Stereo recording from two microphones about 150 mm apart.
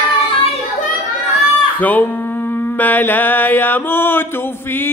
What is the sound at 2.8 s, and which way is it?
Mantra, 10° left (ahead or behind).